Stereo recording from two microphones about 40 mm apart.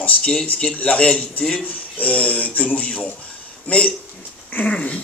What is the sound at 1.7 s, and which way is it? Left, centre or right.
A man's voice, left.